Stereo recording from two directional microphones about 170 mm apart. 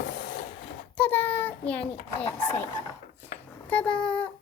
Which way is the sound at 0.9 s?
10° left (ahead or behind).